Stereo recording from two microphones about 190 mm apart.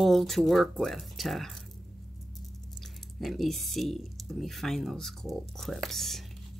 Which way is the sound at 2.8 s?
Centre (ahead or behind).